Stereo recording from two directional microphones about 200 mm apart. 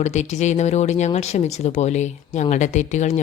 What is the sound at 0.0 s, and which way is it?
Speech, 35° left (ahead or behind).